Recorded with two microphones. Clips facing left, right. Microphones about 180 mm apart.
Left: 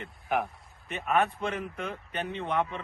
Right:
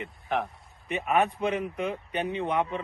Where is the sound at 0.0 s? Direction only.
Centre (ahead or behind).